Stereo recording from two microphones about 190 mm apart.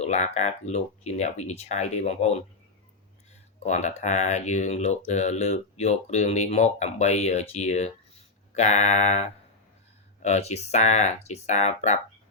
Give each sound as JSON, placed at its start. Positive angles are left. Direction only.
{"t": 0.0, "sound": "speech", "side_deg": 35}
{"t": 3.7, "sound": "speech", "side_deg": 35}
{"t": 10.2, "sound": "speech", "side_deg": 35}